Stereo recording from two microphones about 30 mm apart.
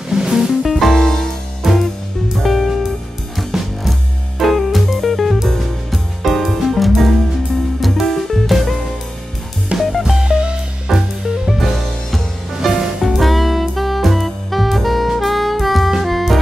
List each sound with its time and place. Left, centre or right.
0.1 s music: centre
0.7 s music: centre
0.9 s music: centre
1.6 s music: centre
2.3 s music: centre
9.8 s music: centre
12.7 s music: centre
13.1 s saxophone: centre
16.0 s music: centre